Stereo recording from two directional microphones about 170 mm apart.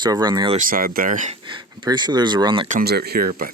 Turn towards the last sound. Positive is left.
turn(degrees=-65)  # may be behind; listen again after turning